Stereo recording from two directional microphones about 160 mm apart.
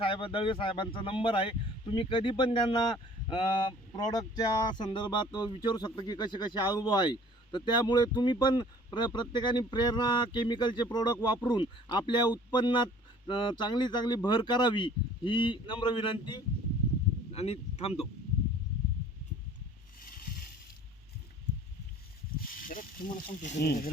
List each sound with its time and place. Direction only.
0.0 s a man's voice: 35° left (ahead or behind)
17.3 s speech: 40° left (ahead or behind)
20.0 s a sound: 65° left (ahead or behind)
22.4 s speech: 60° left (ahead or behind)
23.6 s speech: 70° left (ahead or behind)